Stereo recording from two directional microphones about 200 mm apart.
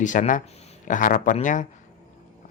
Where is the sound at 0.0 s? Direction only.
40° left (ahead or behind).